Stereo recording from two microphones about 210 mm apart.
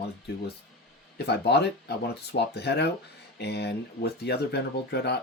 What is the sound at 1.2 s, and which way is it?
Speech, 50° left (ahead or behind).